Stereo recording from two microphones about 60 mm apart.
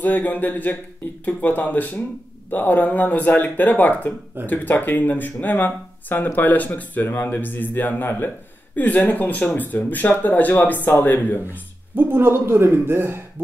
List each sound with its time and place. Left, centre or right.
0.0 s speech: left
7.1 s speech: left
11.5 s speech: right